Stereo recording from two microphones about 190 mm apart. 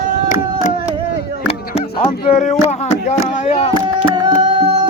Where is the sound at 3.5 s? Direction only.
35° left (ahead or behind).